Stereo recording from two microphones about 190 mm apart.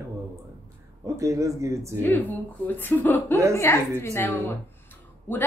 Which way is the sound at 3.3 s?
15° right (ahead or behind).